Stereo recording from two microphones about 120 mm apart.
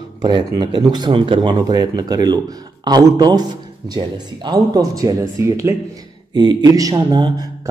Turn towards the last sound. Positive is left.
turn(degrees=-35)  # may be behind; listen again after turning